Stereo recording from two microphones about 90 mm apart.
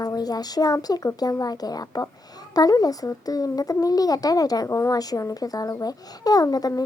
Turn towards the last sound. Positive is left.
turn(degrees=45)  # may be behind; listen again after turning